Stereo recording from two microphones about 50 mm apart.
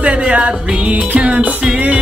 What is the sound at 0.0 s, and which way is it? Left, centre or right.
Music, right.